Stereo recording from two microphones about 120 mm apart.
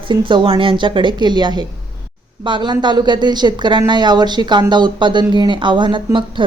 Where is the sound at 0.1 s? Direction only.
40° right (ahead or behind).